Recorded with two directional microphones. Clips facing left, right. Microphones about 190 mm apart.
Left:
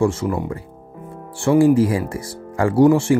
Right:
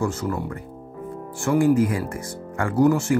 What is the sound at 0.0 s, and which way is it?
Speech, 25° left (ahead or behind).